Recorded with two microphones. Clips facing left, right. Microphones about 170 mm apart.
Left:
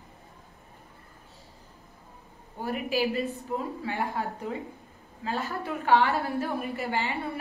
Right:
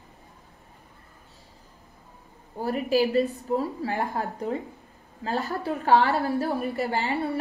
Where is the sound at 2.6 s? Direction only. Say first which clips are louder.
Right 5 dB; 35° right (ahead or behind).